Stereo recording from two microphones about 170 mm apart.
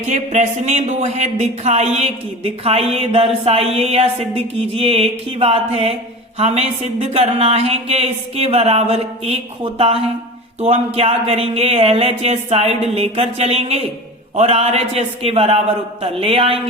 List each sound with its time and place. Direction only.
0.0 s speech: 40° right (ahead or behind)